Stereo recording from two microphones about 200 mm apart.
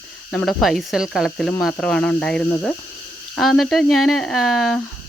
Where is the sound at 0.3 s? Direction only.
5° left (ahead or behind).